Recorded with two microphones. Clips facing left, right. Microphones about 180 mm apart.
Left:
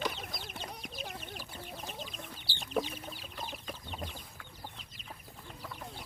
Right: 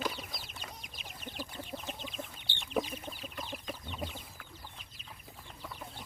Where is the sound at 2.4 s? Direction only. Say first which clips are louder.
Left 2 dB; 35° left (ahead or behind).